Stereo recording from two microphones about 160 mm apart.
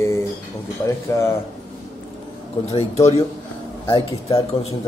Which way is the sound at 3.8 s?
35° left (ahead or behind).